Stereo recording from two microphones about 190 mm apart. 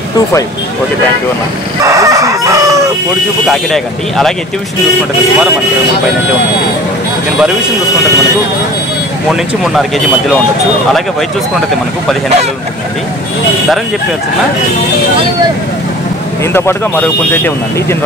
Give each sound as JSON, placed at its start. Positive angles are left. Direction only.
{"t": 1.9, "sound": "crowing", "side_deg": -15}
{"t": 3.4, "sound": "speech", "side_deg": 0}
{"t": 9.3, "sound": "speech", "side_deg": 0}
{"t": 16.5, "sound": "speech", "side_deg": 10}